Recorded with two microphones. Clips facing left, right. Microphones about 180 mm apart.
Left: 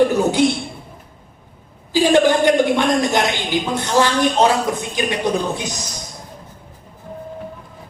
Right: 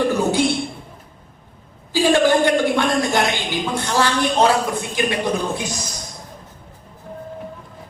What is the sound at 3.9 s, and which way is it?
A man's voice, 20° left (ahead or behind).